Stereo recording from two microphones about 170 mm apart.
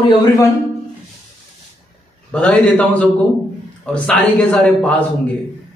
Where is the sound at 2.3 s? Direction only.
10° left (ahead or behind).